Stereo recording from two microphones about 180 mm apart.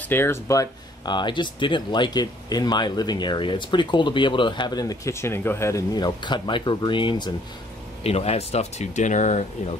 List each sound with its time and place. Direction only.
0.0 s speech: 10° left (ahead or behind); by 9.5 s 40° left (ahead or behind)